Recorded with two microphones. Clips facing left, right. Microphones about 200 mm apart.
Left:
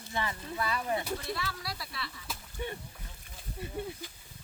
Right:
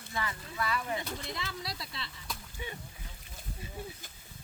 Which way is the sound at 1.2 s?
20° right (ahead or behind).